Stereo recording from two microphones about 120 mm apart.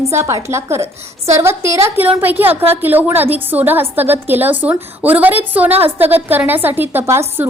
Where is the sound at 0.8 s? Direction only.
60° right (ahead or behind).